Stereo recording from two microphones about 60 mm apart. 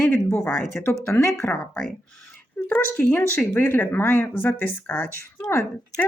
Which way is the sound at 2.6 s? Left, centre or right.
Left.